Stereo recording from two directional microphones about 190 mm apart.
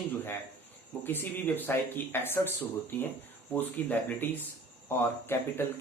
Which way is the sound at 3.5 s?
10° left (ahead or behind).